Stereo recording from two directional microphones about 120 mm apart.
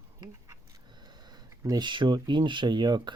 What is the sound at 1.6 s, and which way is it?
Speech, 35° right (ahead or behind).